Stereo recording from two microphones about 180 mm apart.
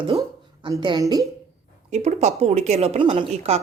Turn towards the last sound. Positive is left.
turn(degrees=-35)  # may be behind; listen again after turning